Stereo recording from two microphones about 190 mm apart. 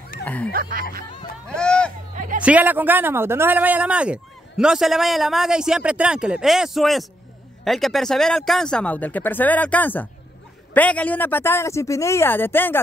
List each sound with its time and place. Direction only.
0.2 s speech: 5° left (ahead or behind)
0.5 s speech: 50° right (ahead or behind)
1.5 s speech: 5° left (ahead or behind)
2.1 s music: 45° right (ahead or behind)
2.4 s speech: 10° right (ahead or behind); by 12.8 s 10° left (ahead or behind)